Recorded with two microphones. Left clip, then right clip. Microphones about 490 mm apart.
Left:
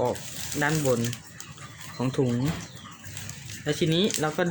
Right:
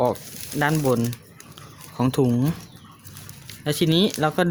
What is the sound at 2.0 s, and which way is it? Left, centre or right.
Speech, right.